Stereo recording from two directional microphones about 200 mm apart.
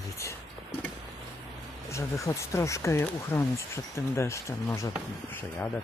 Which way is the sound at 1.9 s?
15° left (ahead or behind).